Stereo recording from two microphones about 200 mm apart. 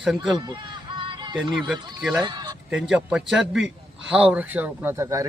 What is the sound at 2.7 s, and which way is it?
A man's voice, 5° right (ahead or behind).